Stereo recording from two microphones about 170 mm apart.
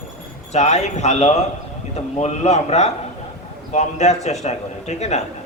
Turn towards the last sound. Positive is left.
turn(degrees=40)  # may be behind; listen again after turning